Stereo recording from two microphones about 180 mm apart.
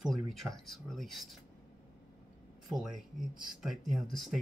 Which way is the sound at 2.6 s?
Centre (ahead or behind).